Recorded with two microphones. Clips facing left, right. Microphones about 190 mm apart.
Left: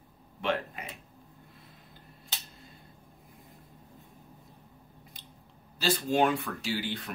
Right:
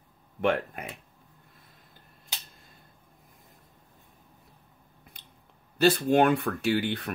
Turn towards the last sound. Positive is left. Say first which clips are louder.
# right 7 dB
turn(degrees=-60)  # may be behind; listen again after turning